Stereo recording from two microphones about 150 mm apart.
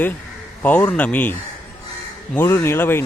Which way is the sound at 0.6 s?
10° left (ahead or behind).